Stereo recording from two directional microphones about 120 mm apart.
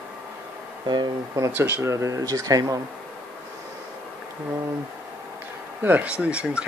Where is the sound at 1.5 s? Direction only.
15° right (ahead or behind).